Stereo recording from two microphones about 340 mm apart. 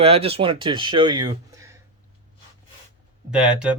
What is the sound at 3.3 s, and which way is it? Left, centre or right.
Speech, centre.